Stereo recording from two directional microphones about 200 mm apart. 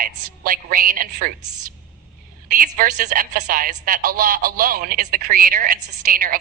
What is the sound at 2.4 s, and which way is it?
A woman's voice, 45° right (ahead or behind).